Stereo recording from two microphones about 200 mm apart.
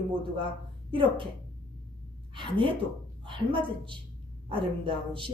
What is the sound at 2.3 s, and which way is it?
A woman's voice, 25° right (ahead or behind).